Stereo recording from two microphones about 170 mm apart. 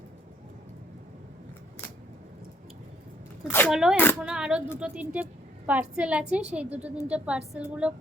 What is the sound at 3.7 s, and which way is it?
A woman's voice, 5° right (ahead or behind).